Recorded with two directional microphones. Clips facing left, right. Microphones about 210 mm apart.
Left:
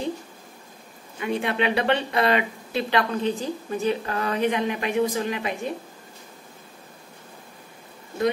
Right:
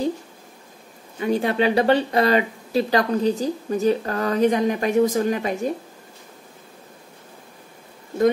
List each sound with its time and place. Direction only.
1.2 s speech: 40° right (ahead or behind)